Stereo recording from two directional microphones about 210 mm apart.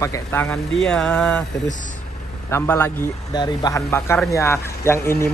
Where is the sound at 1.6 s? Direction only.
35° left (ahead or behind).